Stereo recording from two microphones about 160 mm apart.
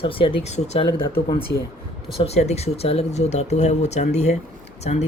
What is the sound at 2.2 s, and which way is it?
Speech, 40° left (ahead or behind).